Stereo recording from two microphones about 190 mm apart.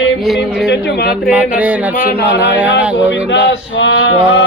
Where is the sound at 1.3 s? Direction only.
10° right (ahead or behind).